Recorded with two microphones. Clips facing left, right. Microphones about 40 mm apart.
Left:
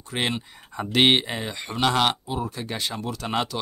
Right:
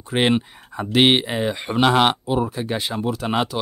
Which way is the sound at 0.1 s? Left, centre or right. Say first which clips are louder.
Right 8 dB; right.